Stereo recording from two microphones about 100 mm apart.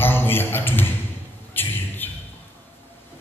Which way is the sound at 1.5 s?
20° left (ahead or behind).